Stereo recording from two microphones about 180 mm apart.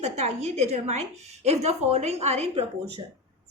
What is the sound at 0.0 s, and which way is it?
A woman's voice, 40° right (ahead or behind).